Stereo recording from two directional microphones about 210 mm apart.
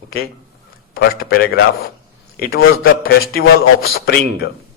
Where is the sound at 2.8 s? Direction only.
45° left (ahead or behind).